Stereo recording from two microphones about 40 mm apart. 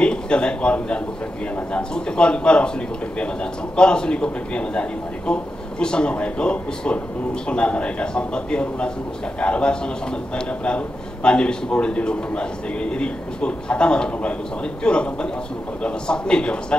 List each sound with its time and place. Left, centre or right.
0.0 s a man's voice: left